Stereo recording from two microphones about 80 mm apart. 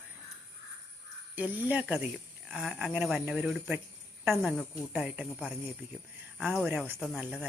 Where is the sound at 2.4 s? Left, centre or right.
Centre.